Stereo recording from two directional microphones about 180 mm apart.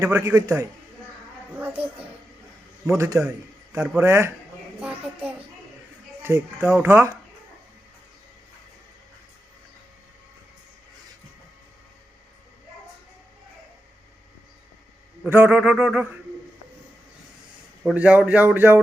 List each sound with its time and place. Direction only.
0.0 s speech: 15° right (ahead or behind)
3.0 s a man's voice: 15° right (ahead or behind)
15.3 s speech: 10° right (ahead or behind)
17.9 s speech: 5° right (ahead or behind)